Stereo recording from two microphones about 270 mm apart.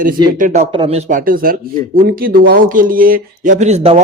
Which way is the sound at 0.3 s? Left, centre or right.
Right.